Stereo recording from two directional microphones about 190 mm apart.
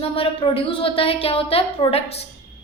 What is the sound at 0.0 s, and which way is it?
A woman's voice, 30° left (ahead or behind).